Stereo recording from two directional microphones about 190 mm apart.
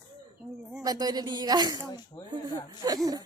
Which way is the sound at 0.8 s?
20° right (ahead or behind).